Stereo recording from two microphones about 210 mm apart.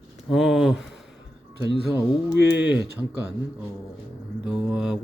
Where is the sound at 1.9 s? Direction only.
10° right (ahead or behind).